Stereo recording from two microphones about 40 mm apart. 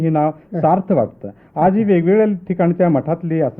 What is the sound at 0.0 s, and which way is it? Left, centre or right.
A man's voice, centre.